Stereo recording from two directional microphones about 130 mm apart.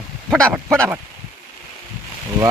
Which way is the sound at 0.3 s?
5° left (ahead or behind).